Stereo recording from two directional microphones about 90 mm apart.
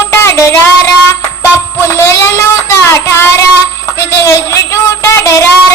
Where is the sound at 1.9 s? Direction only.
30° left (ahead or behind).